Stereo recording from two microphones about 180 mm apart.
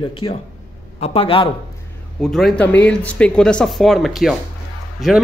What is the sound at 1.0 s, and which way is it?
Speech, 30° left (ahead or behind).